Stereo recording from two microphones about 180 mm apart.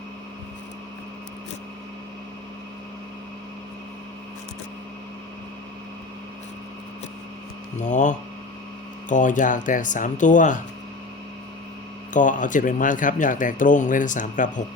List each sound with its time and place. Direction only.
7.8 s speech: 45° left (ahead or behind)
12.1 s speech: 45° left (ahead or behind)